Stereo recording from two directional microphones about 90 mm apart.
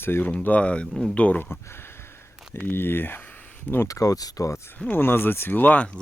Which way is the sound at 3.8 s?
40° left (ahead or behind).